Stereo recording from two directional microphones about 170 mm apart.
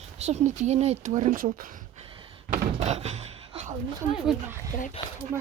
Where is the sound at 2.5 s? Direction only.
45° right (ahead or behind).